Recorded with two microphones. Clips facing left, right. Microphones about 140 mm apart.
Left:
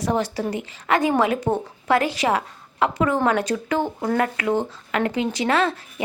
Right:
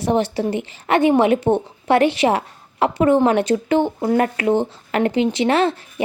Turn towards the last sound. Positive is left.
turn(degrees=-30)  # may be behind; listen again after turning